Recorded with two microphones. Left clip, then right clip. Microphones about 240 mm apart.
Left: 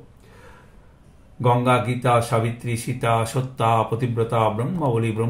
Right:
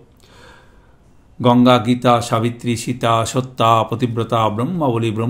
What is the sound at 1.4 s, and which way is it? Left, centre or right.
Speech, right.